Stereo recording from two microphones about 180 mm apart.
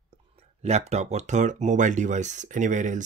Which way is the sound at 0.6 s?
35° right (ahead or behind).